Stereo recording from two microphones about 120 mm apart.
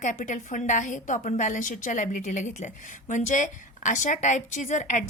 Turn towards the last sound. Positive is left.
turn(degrees=90)